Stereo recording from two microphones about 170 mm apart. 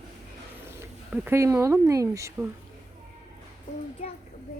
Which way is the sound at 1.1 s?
10° right (ahead or behind).